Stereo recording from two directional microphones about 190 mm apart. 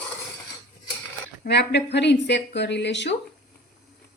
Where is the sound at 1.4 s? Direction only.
60° left (ahead or behind).